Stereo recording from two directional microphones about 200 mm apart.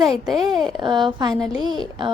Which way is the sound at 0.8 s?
25° right (ahead or behind).